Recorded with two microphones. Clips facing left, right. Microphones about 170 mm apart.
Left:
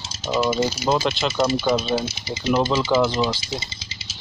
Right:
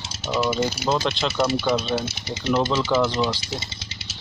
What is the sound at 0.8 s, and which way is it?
Speech, 5° left (ahead or behind).